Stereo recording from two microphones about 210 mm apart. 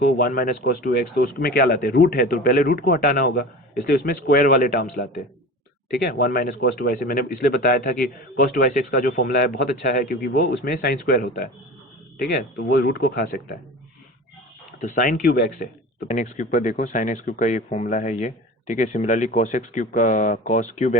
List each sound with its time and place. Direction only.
0.2 s speech: 45° left (ahead or behind)
14.8 s a man's voice: 40° left (ahead or behind)